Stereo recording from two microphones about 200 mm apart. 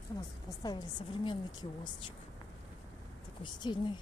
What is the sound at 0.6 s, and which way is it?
Speech, 20° left (ahead or behind).